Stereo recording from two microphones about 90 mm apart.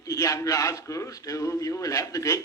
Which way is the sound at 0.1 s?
40° left (ahead or behind).